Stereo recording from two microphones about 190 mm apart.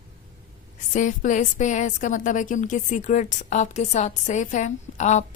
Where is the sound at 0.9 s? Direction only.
40° left (ahead or behind).